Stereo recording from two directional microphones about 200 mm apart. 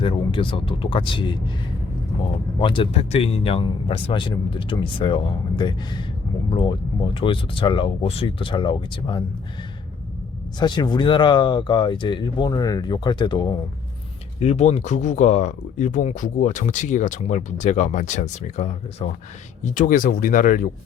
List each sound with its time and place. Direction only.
0.0 s speech: 25° left (ahead or behind)
2.6 s speech: 25° left (ahead or behind)
10.6 s speech: 20° left (ahead or behind)
14.3 s speech: 35° left (ahead or behind)